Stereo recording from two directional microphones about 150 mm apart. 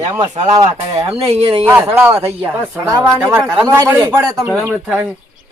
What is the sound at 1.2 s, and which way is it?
Speech, 40° right (ahead or behind).